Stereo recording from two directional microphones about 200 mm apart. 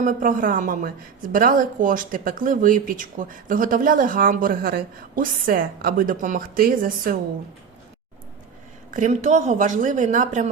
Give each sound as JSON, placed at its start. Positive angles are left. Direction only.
{"t": 0.0, "sound": "a woman's voice", "side_deg": -45}
{"t": 8.9, "sound": "a woman's voice", "side_deg": -40}